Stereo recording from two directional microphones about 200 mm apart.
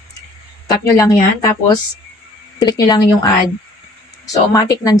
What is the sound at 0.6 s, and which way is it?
Speech, 15° left (ahead or behind).